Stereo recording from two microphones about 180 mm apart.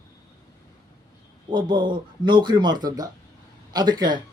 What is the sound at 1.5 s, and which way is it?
Speech, 25° right (ahead or behind).